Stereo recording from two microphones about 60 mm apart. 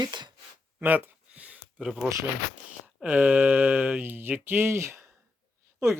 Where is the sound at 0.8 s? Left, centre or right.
Right.